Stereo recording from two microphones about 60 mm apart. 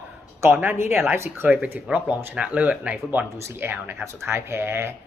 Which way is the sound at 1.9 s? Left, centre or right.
Centre.